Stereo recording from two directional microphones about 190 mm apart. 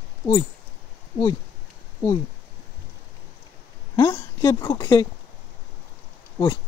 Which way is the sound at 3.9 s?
15° left (ahead or behind).